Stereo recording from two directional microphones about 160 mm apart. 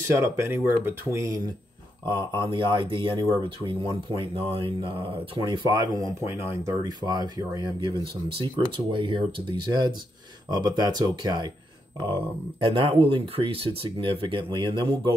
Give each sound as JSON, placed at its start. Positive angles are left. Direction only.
{"t": 0.1, "sound": "speech", "side_deg": -15}